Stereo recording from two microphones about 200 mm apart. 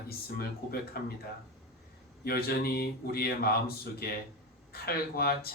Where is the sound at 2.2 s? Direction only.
50° left (ahead or behind).